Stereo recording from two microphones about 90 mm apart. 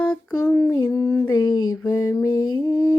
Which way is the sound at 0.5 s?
40° left (ahead or behind).